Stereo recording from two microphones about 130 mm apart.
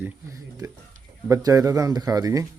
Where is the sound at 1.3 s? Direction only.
30° right (ahead or behind).